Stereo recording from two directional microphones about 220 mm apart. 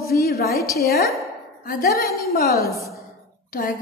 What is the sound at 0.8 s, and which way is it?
A woman's voice, 45° left (ahead or behind).